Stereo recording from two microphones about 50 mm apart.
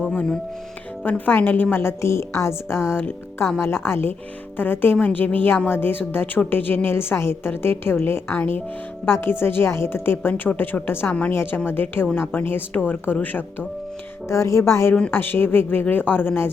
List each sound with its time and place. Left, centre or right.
1.0 s a woman's voice: left
1.7 s a woman's voice: left
4.9 s a woman's voice: left
5.6 s a woman's voice: left
6.9 s a woman's voice: left
14.3 s speech: left
15.1 s a woman's voice: left